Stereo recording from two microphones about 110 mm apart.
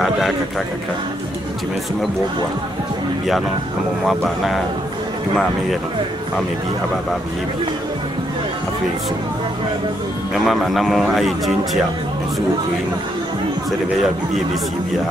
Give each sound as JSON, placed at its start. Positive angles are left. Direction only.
{"t": 4.0, "sound": "speech", "side_deg": 0}
{"t": 10.3, "sound": "speech", "side_deg": 0}